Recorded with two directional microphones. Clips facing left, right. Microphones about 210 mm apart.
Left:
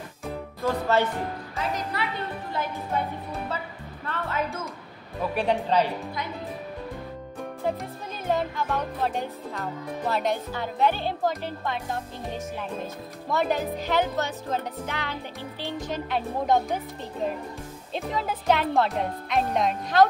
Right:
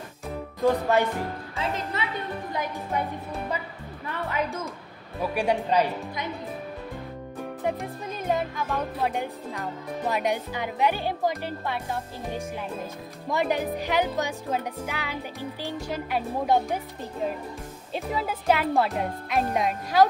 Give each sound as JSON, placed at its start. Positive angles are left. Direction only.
{"t": 0.6, "sound": "speech", "side_deg": -15}
{"t": 1.6, "sound": "speech", "side_deg": -25}
{"t": 4.0, "sound": "music", "side_deg": -15}
{"t": 7.6, "sound": "music", "side_deg": -15}
{"t": 13.3, "sound": "music", "side_deg": -15}
{"t": 17.9, "sound": "music", "side_deg": -5}